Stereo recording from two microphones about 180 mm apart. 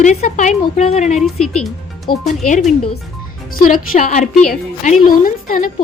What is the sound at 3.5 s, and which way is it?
A woman's voice, 50° left (ahead or behind).